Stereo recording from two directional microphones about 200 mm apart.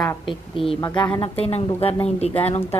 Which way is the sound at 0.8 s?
25° left (ahead or behind).